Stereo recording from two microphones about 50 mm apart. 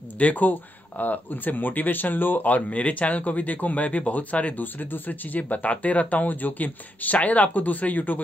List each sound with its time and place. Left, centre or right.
0.2 s speech: left